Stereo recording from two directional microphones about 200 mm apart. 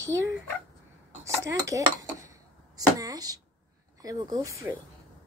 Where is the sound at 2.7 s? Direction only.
15° right (ahead or behind).